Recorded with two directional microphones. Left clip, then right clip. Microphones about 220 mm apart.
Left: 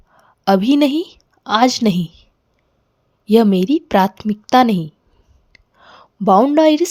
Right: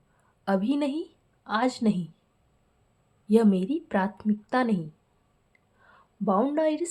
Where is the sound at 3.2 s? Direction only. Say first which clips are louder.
Left 10 dB; 40° left (ahead or behind).